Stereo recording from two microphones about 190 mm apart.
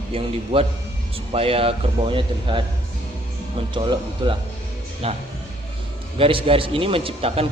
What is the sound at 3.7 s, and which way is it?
A man's voice, 25° right (ahead or behind).